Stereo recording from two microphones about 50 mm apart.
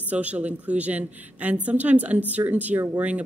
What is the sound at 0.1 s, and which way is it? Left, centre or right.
A woman's voice, right.